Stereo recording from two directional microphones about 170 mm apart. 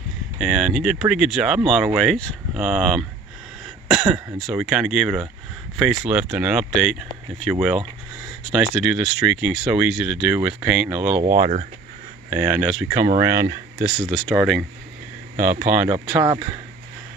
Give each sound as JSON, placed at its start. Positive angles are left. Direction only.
{"t": 0.3, "sound": "speech", "side_deg": 0}
{"t": 12.3, "sound": "speech", "side_deg": -10}
{"t": 13.8, "sound": "speech", "side_deg": 0}
{"t": 15.4, "sound": "speech", "side_deg": -10}
{"t": 16.1, "sound": "speech", "side_deg": -20}